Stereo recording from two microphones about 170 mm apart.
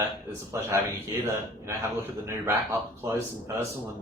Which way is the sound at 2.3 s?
15° right (ahead or behind).